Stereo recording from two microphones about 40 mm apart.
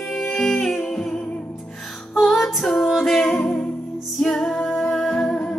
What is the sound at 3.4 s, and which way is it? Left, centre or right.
Music, left.